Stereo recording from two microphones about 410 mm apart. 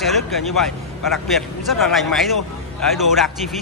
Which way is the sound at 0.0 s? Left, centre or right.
Centre.